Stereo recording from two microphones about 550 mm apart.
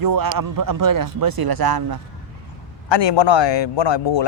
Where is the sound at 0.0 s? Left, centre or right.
Right.